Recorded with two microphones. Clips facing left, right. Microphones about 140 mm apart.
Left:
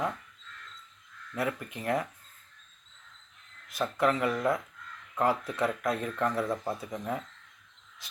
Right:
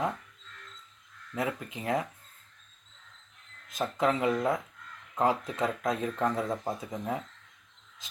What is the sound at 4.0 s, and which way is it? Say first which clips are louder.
Speech: even; 20° right (ahead or behind).